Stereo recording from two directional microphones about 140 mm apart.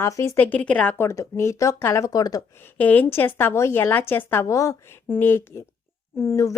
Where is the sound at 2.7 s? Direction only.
10° left (ahead or behind).